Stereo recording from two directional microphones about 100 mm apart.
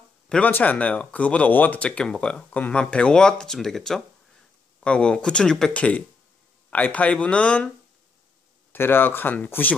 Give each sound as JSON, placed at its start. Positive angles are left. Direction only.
{"t": 0.5, "sound": "speech", "side_deg": 15}
{"t": 8.7, "sound": "speech", "side_deg": 20}